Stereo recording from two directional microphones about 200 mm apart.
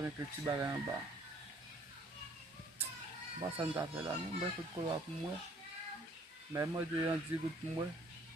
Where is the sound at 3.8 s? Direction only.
15° right (ahead or behind).